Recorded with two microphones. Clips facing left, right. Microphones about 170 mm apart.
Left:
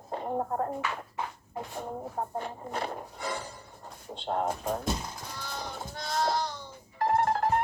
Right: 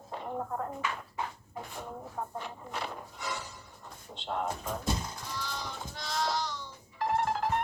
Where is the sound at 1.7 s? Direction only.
40° left (ahead or behind).